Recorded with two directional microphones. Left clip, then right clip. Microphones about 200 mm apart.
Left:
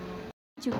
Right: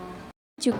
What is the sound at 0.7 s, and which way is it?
Speech, 40° right (ahead or behind).